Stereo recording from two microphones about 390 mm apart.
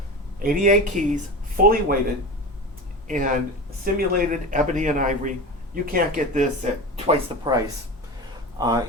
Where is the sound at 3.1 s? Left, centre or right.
Centre.